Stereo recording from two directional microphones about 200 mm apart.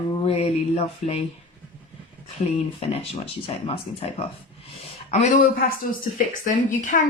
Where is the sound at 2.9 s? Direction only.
30° left (ahead or behind).